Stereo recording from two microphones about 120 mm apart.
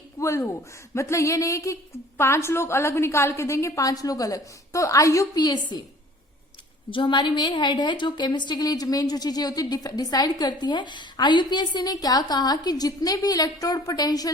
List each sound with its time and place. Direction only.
0.2 s a man's voice: 25° left (ahead or behind)
6.9 s a woman's voice: 40° left (ahead or behind)